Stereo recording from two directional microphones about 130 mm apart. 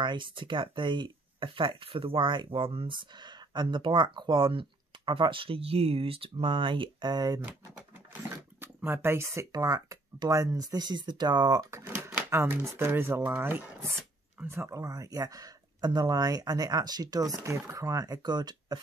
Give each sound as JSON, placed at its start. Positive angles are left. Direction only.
{"t": 0.0, "sound": "speech", "side_deg": -40}
{"t": 7.4, "sound": "speech", "side_deg": -15}
{"t": 11.8, "sound": "speech", "side_deg": -15}